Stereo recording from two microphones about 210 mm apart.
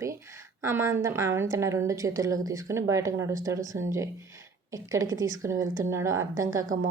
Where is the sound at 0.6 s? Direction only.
15° right (ahead or behind).